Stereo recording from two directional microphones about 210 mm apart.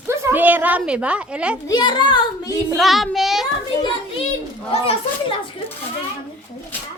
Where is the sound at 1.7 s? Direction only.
20° left (ahead or behind).